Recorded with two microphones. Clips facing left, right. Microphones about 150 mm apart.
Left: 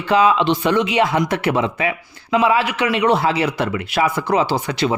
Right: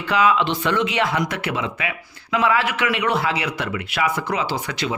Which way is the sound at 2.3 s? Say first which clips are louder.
Left 3 dB; 20° left (ahead or behind).